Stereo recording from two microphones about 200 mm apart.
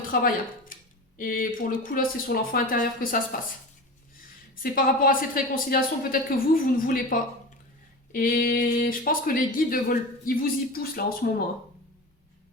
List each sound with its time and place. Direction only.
0.1 s speech: 45° left (ahead or behind)
4.6 s speech: 45° left (ahead or behind)